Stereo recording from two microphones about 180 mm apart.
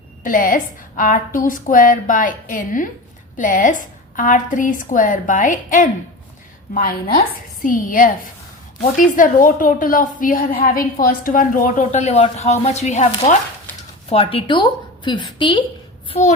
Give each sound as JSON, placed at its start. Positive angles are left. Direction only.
{"t": 0.2, "sound": "a woman's voice", "side_deg": 50}